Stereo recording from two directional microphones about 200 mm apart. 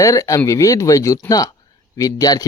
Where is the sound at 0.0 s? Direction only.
15° left (ahead or behind).